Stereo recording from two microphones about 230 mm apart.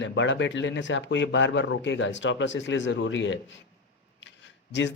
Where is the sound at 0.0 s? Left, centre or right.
Left.